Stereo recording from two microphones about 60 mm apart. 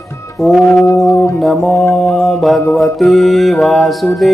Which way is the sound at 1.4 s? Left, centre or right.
Centre.